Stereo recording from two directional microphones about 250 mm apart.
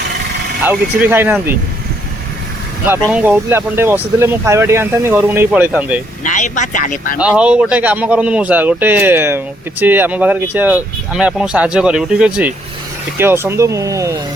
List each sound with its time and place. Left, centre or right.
0.6 s speech: centre
2.8 s speech: centre
6.2 s speech: left
7.2 s speech: centre